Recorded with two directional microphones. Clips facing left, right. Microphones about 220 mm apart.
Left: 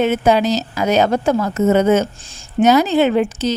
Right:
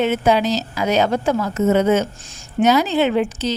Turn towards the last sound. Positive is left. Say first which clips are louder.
# left 3 dB
turn(degrees=45)  # may be behind; listen again after turning